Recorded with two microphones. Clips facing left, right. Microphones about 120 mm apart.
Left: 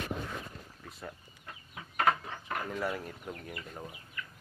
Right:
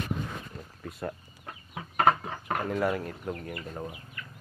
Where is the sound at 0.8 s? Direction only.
55° right (ahead or behind).